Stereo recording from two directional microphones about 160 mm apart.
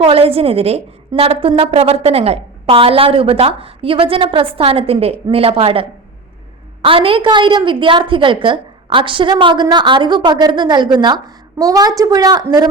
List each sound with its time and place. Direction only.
0.0 s a woman's voice: 35° right (ahead or behind)
6.8 s a woman's voice: 35° right (ahead or behind)